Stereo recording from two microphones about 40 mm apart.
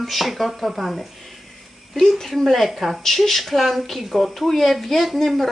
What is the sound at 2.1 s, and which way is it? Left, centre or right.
Speech, centre.